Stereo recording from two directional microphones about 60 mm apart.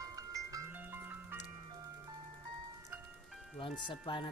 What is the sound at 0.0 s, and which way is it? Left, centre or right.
Music, right.